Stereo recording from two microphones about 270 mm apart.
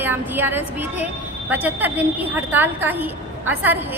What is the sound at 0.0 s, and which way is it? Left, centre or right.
A woman's voice, centre.